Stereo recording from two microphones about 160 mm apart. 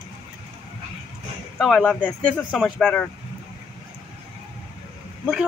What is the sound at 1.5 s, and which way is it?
Speech, centre (ahead or behind).